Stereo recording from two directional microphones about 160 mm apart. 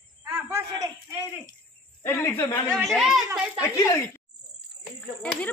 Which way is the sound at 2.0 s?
15° left (ahead or behind).